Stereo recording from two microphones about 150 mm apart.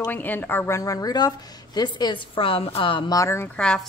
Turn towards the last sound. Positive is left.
turn(degrees=5)  # may be behind; listen again after turning